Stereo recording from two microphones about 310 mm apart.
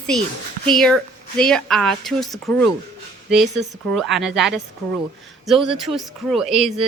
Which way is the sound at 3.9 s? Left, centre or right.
Centre.